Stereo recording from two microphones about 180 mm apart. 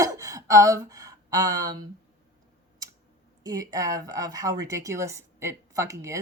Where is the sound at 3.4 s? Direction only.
20° right (ahead or behind).